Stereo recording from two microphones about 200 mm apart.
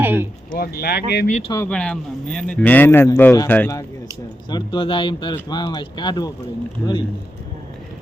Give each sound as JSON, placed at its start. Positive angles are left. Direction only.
{"t": 0.0, "sound": "a sound", "side_deg": -10}
{"t": 0.5, "sound": "speech", "side_deg": 50}
{"t": 1.3, "sound": "speech", "side_deg": 30}
{"t": 1.5, "sound": "speech", "side_deg": 5}
{"t": 4.4, "sound": "speech", "side_deg": 25}